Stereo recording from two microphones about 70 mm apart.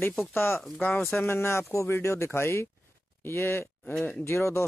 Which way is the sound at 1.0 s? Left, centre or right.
Left.